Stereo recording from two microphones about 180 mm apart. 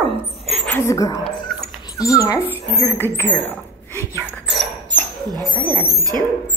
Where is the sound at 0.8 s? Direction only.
15° left (ahead or behind).